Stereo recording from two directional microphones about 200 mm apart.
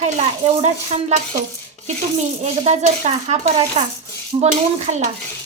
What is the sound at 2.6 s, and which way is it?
Speech, 30° right (ahead or behind).